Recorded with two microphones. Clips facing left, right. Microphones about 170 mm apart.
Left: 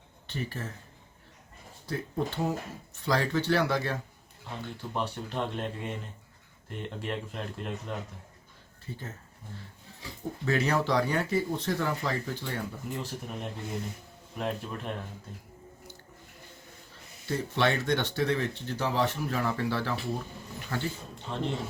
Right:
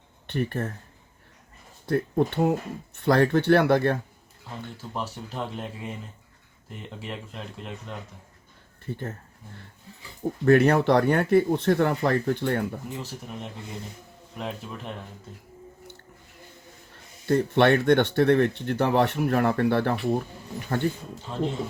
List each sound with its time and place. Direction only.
0.3 s speech: 60° right (ahead or behind)
1.9 s speech: 60° right (ahead or behind)
4.8 s speech: 5° right (ahead or behind)
8.9 s speech: 60° right (ahead or behind)
10.4 s speech: 55° right (ahead or behind)
13.0 s speech: centre (ahead or behind)
16.9 s speech: 60° right (ahead or behind)